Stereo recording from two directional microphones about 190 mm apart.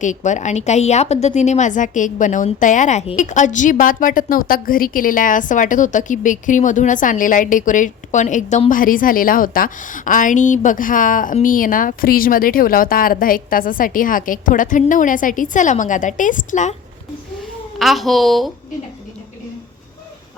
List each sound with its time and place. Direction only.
0.0 s a woman's voice: 40° left (ahead or behind)
17.7 s speech: centre (ahead or behind)